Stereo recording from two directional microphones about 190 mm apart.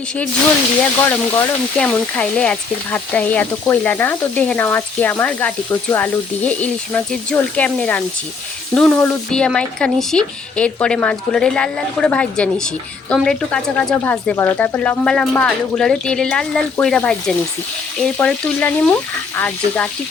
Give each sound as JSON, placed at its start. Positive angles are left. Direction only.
{"t": 1.0, "sound": "speech", "side_deg": 10}